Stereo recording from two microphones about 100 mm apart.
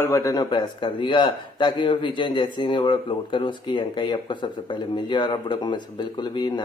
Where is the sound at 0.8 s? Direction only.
55° left (ahead or behind).